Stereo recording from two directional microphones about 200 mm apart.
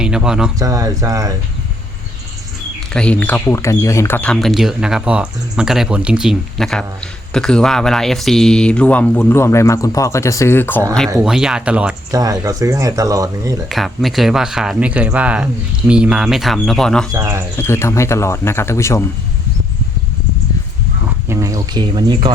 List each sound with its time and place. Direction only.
0.0 s speech: 5° right (ahead or behind)
0.6 s speech: 15° right (ahead or behind)
2.9 s speech: 5° left (ahead or behind)
11.2 s speech: 5° right (ahead or behind)
12.1 s speech: 15° right (ahead or behind)
13.7 s speech: centre (ahead or behind)
17.1 s speech: 15° right (ahead or behind)
17.6 s speech: 10° left (ahead or behind)
21.2 s speech: 15° right (ahead or behind)